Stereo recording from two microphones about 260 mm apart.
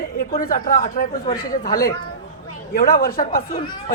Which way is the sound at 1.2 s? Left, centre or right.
Left.